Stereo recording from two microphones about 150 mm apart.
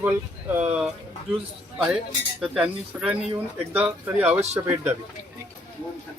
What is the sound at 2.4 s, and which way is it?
Speech, 5° right (ahead or behind).